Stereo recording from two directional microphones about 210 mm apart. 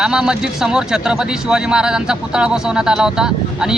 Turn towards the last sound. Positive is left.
turn(degrees=-5)  # may be behind; listen again after turning